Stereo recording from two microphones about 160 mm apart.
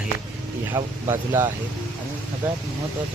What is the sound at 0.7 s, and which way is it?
Speech, 15° right (ahead or behind).